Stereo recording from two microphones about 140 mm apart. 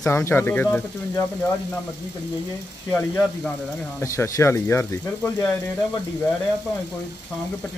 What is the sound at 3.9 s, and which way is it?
A man's voice, 20° left (ahead or behind).